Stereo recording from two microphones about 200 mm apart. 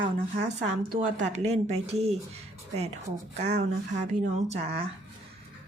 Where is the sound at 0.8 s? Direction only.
45° right (ahead or behind).